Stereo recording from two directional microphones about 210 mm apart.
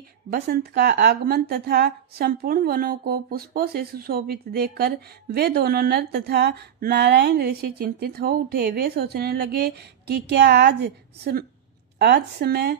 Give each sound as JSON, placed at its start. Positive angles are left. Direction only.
{"t": 0.3, "sound": "speech", "side_deg": -50}